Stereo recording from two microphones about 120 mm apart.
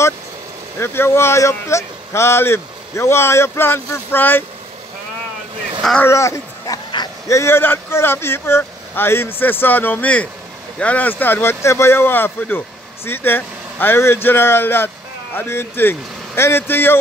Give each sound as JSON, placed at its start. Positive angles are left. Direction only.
{"t": 0.7, "sound": "speech", "side_deg": 20}
{"t": 5.8, "sound": "speech", "side_deg": 0}
{"t": 6.0, "sound": "speech", "side_deg": 25}